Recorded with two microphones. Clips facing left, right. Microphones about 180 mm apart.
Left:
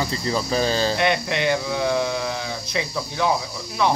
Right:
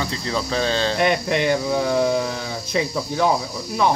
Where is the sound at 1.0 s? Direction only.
40° right (ahead or behind).